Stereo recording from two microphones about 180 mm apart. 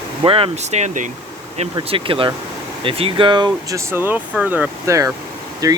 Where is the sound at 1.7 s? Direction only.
30° right (ahead or behind).